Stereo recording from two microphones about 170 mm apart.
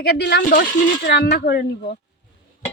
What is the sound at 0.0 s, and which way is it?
Speech, 70° left (ahead or behind).